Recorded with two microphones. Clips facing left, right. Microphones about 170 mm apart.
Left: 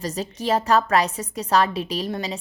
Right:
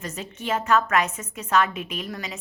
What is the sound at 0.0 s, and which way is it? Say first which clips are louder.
A woman's voice: left 6 dB; 35° left (ahead or behind).